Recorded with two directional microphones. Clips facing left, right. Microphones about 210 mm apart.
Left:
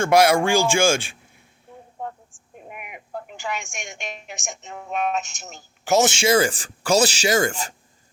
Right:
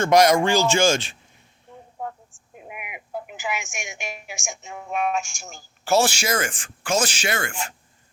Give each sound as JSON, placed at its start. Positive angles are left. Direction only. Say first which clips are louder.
{"t": 0.0, "sound": "speech", "louder": "even", "side_deg": 10}
{"t": 1.7, "sound": "a sound", "louder": "left 1 dB", "side_deg": 5}
{"t": 2.6, "sound": "a woman's voice", "louder": "right 1 dB", "side_deg": -5}
{"t": 5.8, "sound": "speech", "louder": "left 2 dB", "side_deg": 15}